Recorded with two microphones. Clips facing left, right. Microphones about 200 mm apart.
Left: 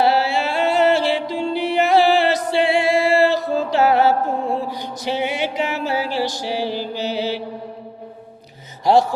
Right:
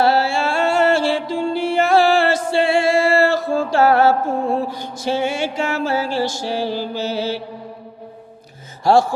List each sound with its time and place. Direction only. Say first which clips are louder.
0.0 s music: right 1 dB; 15° left (ahead or behind)
8.8 s music: right 1 dB; 20° left (ahead or behind)